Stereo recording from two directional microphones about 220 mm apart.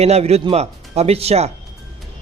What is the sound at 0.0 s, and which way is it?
A man's voice, 30° right (ahead or behind).